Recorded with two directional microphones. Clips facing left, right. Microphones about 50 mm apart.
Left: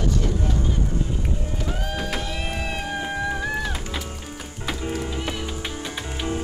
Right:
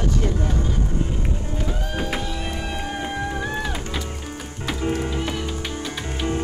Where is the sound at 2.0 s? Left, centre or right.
Right.